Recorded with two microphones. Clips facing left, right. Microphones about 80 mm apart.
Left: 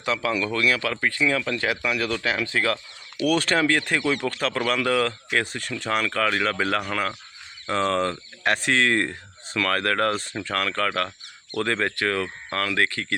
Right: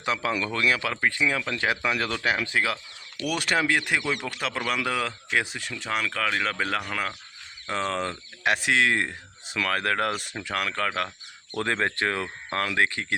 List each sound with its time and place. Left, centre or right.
0.0 s speech: right